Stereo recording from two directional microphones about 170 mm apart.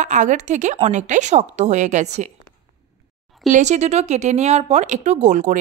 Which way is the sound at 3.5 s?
45° right (ahead or behind).